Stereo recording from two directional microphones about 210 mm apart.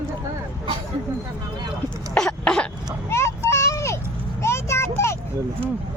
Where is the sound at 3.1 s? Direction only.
15° left (ahead or behind).